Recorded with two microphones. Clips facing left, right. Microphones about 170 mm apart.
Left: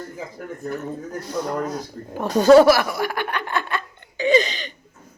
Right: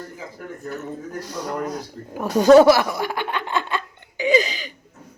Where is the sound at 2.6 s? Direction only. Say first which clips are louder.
Right 1 dB; 20° right (ahead or behind).